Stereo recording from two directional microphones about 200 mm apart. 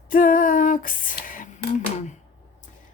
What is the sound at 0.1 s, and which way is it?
Female singing, 45° left (ahead or behind).